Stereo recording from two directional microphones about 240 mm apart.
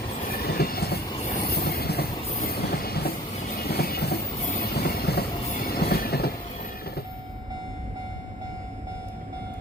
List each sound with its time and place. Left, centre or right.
0.3 s train: left
1.4 s railroad car: left
2.5 s train: left
3.6 s vehicle: left
4.7 s train: left